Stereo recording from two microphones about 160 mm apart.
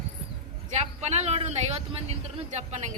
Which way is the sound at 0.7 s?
45° right (ahead or behind).